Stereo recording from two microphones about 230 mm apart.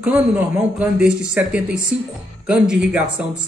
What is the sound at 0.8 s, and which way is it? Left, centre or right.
A man's voice, centre.